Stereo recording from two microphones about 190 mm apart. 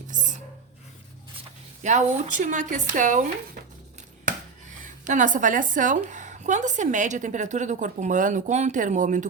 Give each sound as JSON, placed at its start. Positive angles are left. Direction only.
{"t": 0.1, "sound": "a sound", "side_deg": -40}
{"t": 1.8, "sound": "speech", "side_deg": -40}
{"t": 4.8, "sound": "a woman's voice", "side_deg": -40}